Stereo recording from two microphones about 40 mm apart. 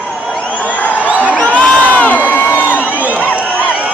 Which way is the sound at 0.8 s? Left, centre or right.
Left.